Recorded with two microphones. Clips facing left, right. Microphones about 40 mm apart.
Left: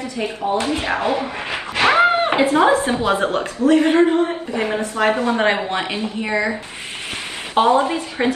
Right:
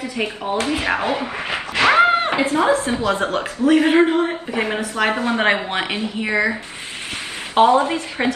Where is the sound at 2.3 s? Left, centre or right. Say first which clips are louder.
Left 3 dB; left.